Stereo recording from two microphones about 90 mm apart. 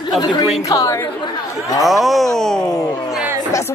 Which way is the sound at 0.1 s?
60° left (ahead or behind).